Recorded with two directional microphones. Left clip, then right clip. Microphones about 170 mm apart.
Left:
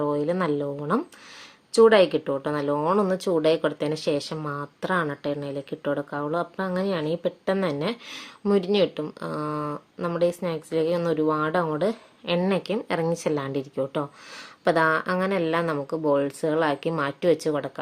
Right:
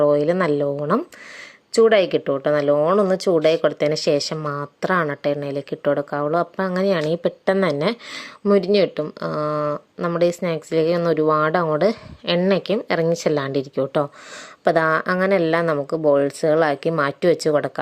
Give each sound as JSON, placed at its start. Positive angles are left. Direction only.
{"t": 0.0, "sound": "speech", "side_deg": -25}